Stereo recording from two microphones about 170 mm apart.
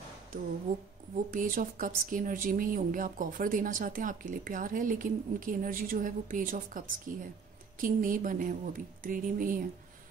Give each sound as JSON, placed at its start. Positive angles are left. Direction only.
{"t": 1.1, "sound": "speech", "side_deg": -55}